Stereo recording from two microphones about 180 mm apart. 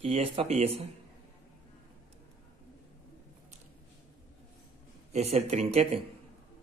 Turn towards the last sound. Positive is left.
turn(degrees=-35)  # may be behind; listen again after turning